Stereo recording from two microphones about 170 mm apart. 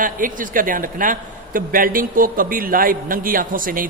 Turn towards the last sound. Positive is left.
turn(degrees=-55)  # may be behind; listen again after turning